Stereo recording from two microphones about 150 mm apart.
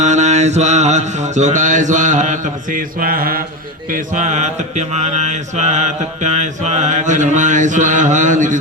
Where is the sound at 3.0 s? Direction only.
75° right (ahead or behind).